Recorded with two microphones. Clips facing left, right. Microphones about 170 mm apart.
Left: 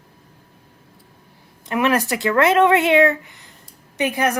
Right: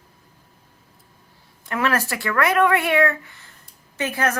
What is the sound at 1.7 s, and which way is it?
A woman's voice, 20° left (ahead or behind).